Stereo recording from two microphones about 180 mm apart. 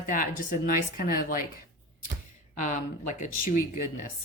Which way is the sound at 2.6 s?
45° left (ahead or behind).